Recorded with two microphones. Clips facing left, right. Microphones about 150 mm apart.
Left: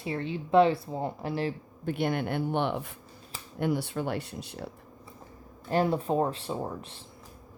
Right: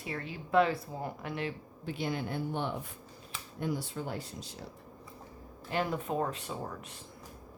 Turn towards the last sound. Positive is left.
turn(degrees=30)  # may be behind; listen again after turning